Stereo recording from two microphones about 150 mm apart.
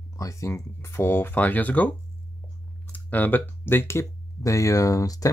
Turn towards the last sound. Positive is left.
turn(degrees=25)  # may be behind; listen again after turning